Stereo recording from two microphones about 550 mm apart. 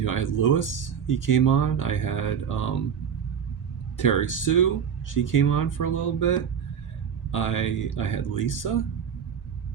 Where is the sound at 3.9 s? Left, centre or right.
Left.